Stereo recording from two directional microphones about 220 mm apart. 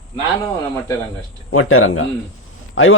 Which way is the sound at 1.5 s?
70° left (ahead or behind).